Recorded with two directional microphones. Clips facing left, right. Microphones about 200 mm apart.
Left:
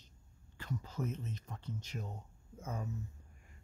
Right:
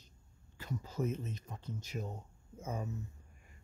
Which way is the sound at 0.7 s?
10° right (ahead or behind).